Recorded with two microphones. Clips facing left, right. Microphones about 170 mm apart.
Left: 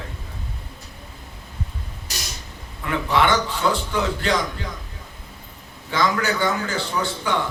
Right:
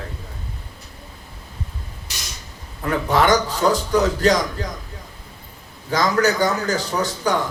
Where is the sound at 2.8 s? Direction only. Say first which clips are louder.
Right 2 dB; 40° right (ahead or behind).